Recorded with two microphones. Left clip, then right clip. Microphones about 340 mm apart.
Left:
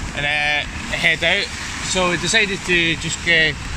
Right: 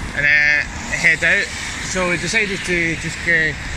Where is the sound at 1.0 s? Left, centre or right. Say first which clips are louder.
Right 2 dB; left.